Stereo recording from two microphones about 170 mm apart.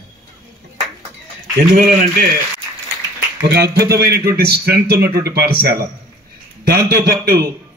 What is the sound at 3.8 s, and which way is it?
Speech, 20° right (ahead or behind).